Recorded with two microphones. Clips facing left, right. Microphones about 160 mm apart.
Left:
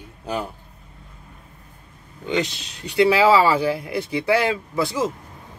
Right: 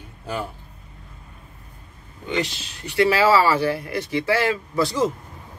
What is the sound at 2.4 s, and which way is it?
Speech, 15° left (ahead or behind).